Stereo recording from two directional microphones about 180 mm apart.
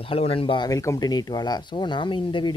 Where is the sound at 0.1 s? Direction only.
30° left (ahead or behind).